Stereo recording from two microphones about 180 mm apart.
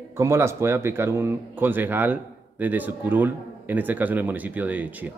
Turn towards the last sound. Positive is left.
turn(degrees=-10)  # may be behind; listen again after turning